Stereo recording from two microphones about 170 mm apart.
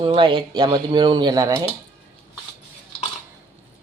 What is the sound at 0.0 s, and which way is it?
Speech, 30° right (ahead or behind).